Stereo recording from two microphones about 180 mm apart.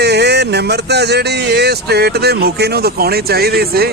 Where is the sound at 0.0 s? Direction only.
65° right (ahead or behind).